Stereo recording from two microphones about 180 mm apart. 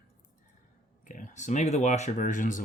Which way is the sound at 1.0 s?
45° left (ahead or behind).